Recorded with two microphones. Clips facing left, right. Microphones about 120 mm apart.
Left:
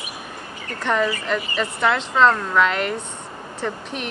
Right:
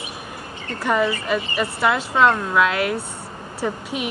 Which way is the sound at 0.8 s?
10° right (ahead or behind).